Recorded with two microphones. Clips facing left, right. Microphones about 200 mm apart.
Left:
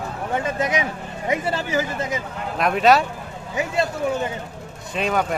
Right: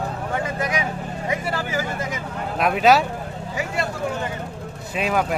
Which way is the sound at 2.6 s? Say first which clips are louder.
Even; centre (ahead or behind).